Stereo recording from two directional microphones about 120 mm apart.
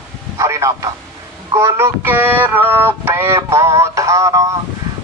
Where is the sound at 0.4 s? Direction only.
25° right (ahead or behind).